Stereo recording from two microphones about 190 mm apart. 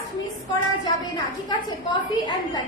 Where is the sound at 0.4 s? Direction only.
20° left (ahead or behind).